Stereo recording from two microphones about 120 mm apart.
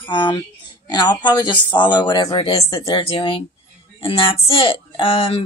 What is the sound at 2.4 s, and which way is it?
Speech, 55° left (ahead or behind).